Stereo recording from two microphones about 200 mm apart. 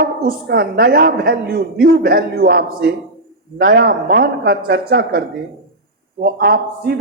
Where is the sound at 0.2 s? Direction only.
50° right (ahead or behind).